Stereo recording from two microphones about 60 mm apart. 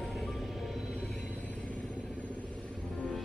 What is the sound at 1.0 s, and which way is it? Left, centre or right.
Vehicle, centre.